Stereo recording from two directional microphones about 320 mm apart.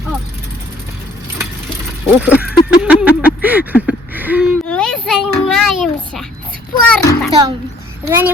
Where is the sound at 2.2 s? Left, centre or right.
Centre.